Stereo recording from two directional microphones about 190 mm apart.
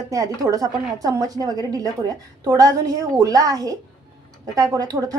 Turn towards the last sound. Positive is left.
turn(degrees=-20)  # may be behind; listen again after turning